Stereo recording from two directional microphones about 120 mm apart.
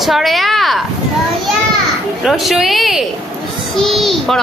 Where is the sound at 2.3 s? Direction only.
Centre (ahead or behind).